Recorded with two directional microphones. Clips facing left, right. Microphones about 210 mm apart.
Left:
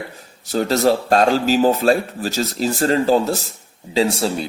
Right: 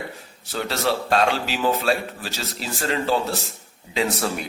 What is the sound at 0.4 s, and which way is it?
Speech, 40° left (ahead or behind).